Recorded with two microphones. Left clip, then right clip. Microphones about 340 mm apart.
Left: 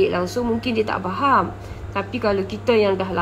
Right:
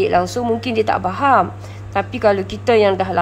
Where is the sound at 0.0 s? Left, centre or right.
Centre.